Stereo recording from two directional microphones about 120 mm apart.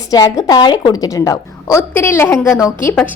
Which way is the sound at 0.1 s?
30° left (ahead or behind).